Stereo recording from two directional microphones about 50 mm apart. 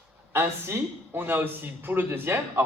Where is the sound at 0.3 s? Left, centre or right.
Right.